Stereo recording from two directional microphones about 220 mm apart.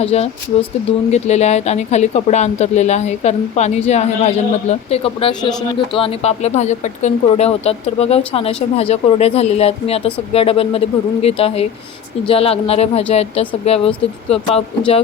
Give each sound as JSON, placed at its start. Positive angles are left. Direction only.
{"t": 0.0, "sound": "speech", "side_deg": 30}